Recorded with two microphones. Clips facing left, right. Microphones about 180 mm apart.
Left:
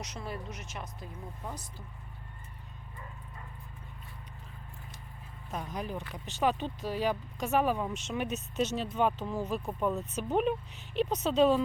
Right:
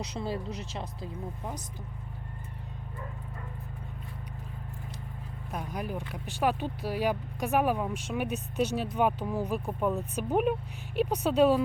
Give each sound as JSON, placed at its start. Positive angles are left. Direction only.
{"t": 0.0, "sound": "speech", "side_deg": -30}
{"t": 5.5, "sound": "speech", "side_deg": -10}